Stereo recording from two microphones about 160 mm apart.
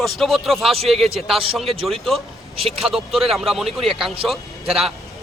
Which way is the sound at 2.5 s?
35° right (ahead or behind).